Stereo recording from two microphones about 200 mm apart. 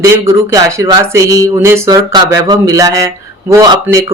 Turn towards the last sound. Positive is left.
turn(degrees=-15)  # may be behind; listen again after turning